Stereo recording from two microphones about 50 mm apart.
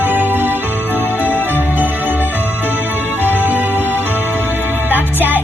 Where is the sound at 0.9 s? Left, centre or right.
Left.